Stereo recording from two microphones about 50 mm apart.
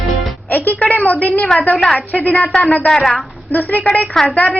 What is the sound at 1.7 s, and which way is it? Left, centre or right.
Speech, centre.